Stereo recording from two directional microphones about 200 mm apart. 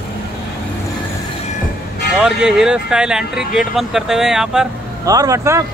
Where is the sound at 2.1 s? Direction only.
5° right (ahead or behind).